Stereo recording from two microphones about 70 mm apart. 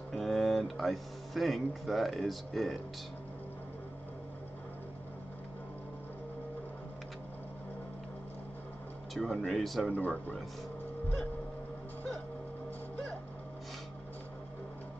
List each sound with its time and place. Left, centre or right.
0.1 s speech: centre
9.1 s speech: centre
9.9 s speech: left